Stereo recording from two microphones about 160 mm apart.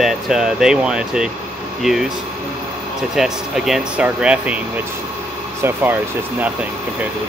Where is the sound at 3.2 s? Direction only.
Centre (ahead or behind).